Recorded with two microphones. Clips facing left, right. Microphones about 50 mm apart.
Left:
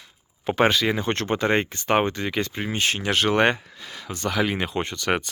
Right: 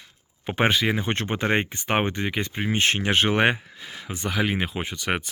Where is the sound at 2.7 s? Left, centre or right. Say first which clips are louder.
Right 5 dB; right.